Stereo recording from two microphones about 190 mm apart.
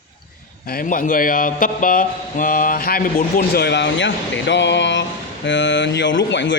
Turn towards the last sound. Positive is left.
turn(degrees=70)  # may be behind; listen again after turning